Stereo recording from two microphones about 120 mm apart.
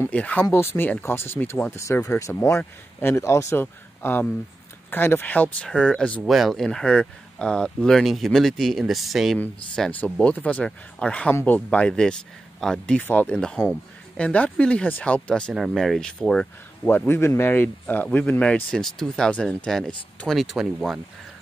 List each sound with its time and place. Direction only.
0.0 s speech: 10° left (ahead or behind)
6.2 s speech: centre (ahead or behind)
9.8 s speech: 10° left (ahead or behind)
16.9 s speech: 20° left (ahead or behind); by 21.0 s 5° right (ahead or behind)